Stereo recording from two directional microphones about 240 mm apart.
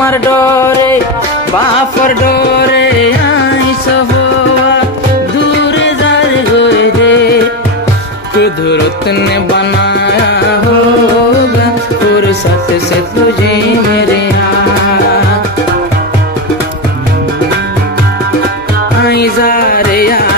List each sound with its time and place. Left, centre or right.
0.0 s music: centre
2.0 s music: left
6.6 s music: left
9.6 s music: left
19.0 s music: left